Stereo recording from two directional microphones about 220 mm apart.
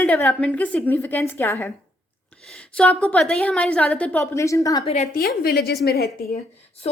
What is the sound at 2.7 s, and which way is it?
A woman's voice, 5° left (ahead or behind).